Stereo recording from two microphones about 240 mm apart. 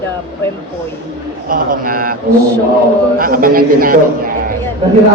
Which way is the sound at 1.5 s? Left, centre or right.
Right.